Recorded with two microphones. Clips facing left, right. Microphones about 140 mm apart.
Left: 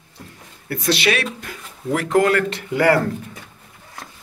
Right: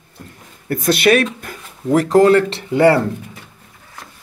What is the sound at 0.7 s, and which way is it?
Speech, 50° right (ahead or behind).